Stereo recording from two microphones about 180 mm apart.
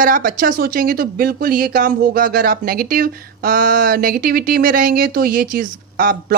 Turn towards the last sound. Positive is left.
turn(degrees=-50)  # may be behind; listen again after turning